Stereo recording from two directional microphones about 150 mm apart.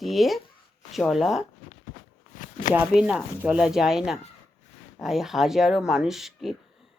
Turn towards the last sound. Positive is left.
turn(degrees=0)  # may be behind; listen again after turning